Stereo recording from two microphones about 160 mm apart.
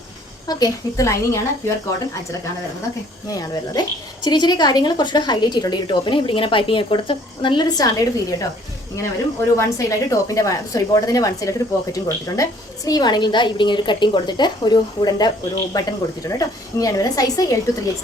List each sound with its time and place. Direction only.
0.4 s a woman's voice: 25° left (ahead or behind)
3.2 s a woman's voice: 25° left (ahead or behind)
9.7 s a woman's voice: 20° left (ahead or behind)